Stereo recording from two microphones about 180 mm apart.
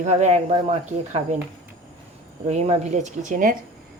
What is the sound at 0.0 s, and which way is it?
Speech, 40° right (ahead or behind).